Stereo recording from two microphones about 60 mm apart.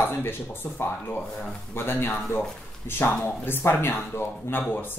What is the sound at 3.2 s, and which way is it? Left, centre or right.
Speech, left.